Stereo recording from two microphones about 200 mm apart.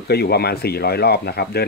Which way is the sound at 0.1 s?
55° left (ahead or behind).